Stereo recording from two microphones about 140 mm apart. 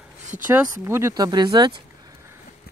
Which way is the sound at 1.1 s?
30° right (ahead or behind).